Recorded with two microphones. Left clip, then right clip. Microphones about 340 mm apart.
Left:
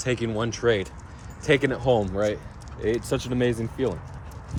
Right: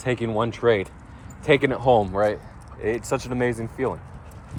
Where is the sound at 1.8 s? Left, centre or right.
Right.